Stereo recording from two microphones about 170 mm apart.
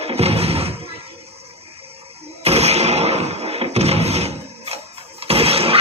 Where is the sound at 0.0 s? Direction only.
35° right (ahead or behind).